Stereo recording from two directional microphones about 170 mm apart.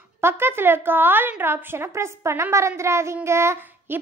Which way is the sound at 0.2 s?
15° right (ahead or behind).